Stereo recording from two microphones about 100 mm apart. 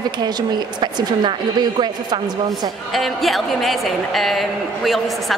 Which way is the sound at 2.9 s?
Centre (ahead or behind).